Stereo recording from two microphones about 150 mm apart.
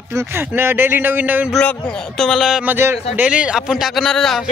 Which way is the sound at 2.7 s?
15° right (ahead or behind).